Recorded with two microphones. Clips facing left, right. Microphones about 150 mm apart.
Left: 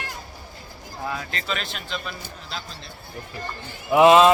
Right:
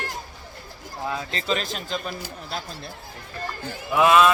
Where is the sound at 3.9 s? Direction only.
25° left (ahead or behind).